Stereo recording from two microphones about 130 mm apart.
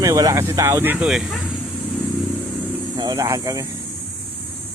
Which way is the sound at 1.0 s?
5° right (ahead or behind).